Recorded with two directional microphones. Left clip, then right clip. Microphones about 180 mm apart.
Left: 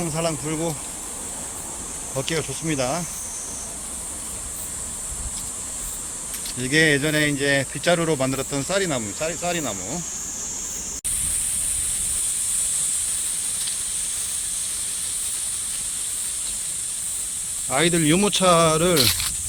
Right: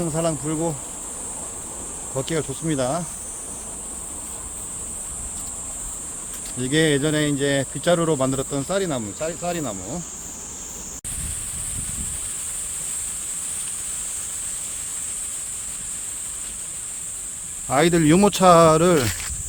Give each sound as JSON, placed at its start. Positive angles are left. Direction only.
{"t": 0.1, "sound": "speech", "side_deg": -25}
{"t": 2.1, "sound": "speech", "side_deg": -25}
{"t": 6.6, "sound": "speech", "side_deg": -25}
{"t": 17.7, "sound": "speech", "side_deg": -30}